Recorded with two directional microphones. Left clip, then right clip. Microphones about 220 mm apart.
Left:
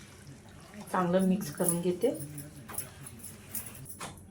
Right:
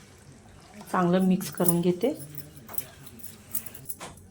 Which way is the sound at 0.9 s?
40° right (ahead or behind).